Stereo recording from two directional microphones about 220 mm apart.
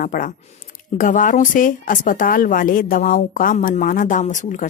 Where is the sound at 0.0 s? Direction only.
40° left (ahead or behind).